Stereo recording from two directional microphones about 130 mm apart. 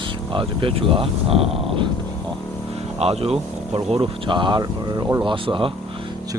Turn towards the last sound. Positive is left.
turn(degrees=-40)  # may be behind; listen again after turning